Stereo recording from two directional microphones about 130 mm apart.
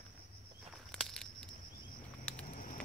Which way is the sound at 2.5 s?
90° left.